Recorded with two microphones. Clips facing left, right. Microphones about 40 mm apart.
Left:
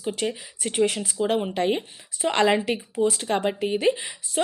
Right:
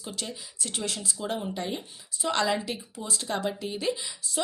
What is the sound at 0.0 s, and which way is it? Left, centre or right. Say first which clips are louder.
Speech: left 10 dB; left.